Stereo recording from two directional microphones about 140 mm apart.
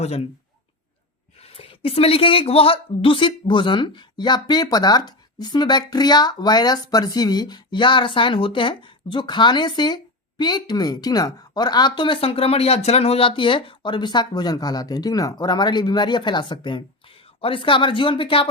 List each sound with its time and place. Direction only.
0.0 s speech: 50° left (ahead or behind)
1.4 s speech: 45° left (ahead or behind)